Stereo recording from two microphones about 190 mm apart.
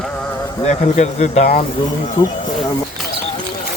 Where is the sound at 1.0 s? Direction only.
35° left (ahead or behind).